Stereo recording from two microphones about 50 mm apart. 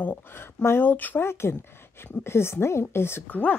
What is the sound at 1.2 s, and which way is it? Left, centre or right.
A woman's voice, left.